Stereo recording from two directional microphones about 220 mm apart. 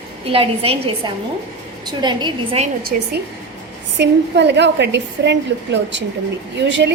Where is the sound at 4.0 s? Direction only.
50° right (ahead or behind).